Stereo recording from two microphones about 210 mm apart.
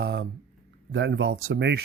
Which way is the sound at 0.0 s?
50° right (ahead or behind).